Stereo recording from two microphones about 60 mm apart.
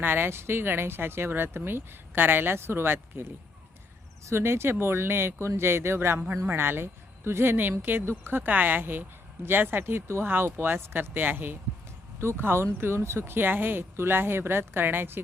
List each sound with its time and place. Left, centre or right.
0.0 s speech: right